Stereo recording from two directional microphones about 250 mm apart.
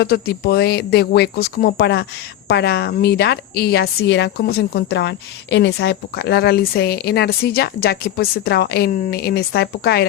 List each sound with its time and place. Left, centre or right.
0.0 s a woman's voice: left